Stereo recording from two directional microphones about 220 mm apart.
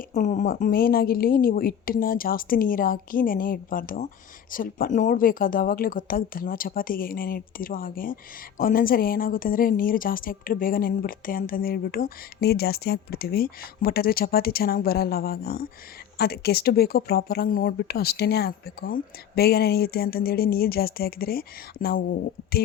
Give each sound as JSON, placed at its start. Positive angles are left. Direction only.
{"t": 0.1, "sound": "speech", "side_deg": 35}